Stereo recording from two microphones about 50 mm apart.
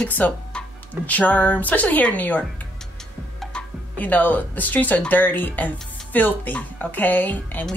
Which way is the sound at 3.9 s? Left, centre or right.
Left.